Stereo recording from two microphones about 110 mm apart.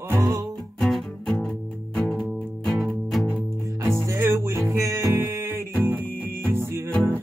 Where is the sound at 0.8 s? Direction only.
5° left (ahead or behind).